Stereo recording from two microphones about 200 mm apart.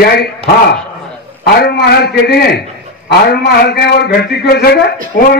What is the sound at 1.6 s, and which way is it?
A man's voice, 55° left (ahead or behind).